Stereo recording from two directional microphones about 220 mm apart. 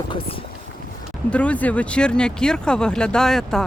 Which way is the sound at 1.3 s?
5° left (ahead or behind).